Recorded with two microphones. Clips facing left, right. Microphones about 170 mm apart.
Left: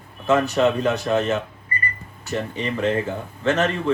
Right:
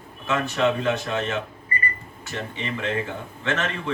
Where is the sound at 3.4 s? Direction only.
40° left (ahead or behind).